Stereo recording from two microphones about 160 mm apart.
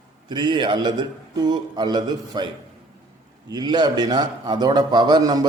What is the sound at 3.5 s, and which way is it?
A man's voice, 25° right (ahead or behind).